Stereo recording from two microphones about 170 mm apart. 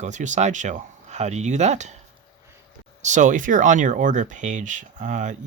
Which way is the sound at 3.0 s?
45° right (ahead or behind).